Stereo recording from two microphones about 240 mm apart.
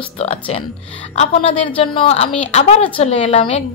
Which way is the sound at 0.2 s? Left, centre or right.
Left.